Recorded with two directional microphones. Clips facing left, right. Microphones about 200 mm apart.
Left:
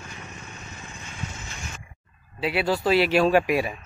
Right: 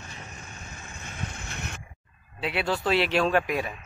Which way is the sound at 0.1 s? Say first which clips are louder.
Left 2 dB; 35° right (ahead or behind).